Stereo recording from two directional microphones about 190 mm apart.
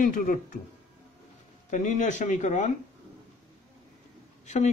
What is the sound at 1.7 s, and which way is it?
Speech, 40° left (ahead or behind).